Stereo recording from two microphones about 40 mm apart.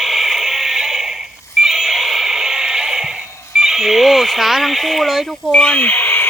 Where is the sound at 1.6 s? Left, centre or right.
Centre.